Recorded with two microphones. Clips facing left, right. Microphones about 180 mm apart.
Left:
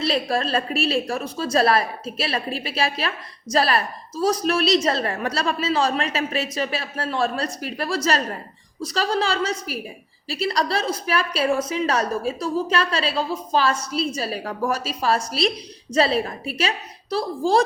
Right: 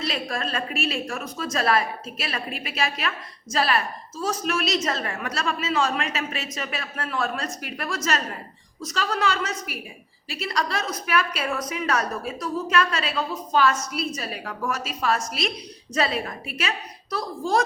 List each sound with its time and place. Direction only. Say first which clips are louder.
0.0 s a woman's voice: left 6 dB; 35° left (ahead or behind)